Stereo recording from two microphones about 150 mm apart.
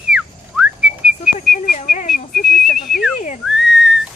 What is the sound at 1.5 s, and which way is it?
Whistling, 55° left (ahead or behind).